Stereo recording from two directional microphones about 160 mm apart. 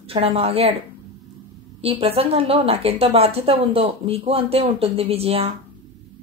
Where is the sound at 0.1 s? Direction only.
40° right (ahead or behind).